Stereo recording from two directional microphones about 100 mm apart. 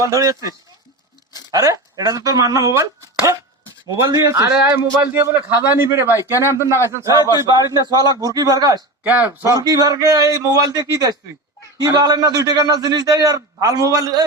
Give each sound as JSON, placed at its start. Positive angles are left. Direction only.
{"t": 0.0, "sound": "a man's voice", "side_deg": -35}
{"t": 4.5, "sound": "a man's voice", "side_deg": -20}
{"t": 9.0, "sound": "speech", "side_deg": -15}
{"t": 9.4, "sound": "a man's voice", "side_deg": -35}